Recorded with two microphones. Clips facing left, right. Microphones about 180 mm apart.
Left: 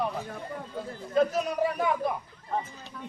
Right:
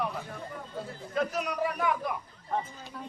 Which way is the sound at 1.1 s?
30° left (ahead or behind).